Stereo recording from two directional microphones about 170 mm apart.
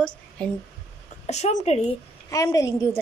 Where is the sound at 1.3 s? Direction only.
45° left (ahead or behind).